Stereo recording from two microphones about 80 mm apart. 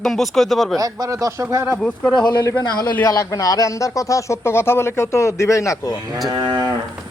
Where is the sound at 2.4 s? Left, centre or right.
Left.